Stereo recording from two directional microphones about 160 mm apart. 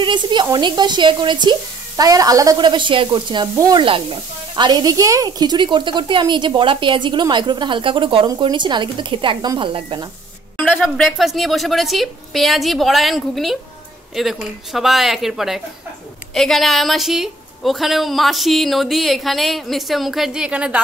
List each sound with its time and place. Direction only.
0.0 s speech: 30° right (ahead or behind)
10.6 s a woman's voice: 5° left (ahead or behind)